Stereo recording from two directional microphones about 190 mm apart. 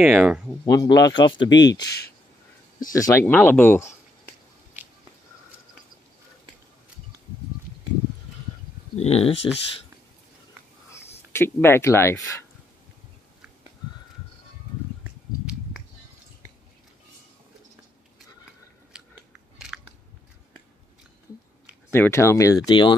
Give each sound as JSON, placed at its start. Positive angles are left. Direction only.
{"t": 0.0, "sound": "speech", "side_deg": -5}
{"t": 0.7, "sound": "speech", "side_deg": 20}
{"t": 2.9, "sound": "speech", "side_deg": 15}
{"t": 8.9, "sound": "speech", "side_deg": 35}
{"t": 11.3, "sound": "speech", "side_deg": 10}
{"t": 18.9, "sound": "scissors", "side_deg": -5}
{"t": 21.9, "sound": "speech", "side_deg": 15}